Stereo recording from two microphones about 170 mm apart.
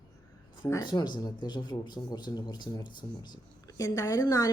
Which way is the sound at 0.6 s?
25° left (ahead or behind).